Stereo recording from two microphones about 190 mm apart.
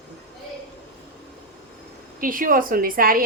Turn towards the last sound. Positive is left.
turn(degrees=-50)  # may be behind; listen again after turning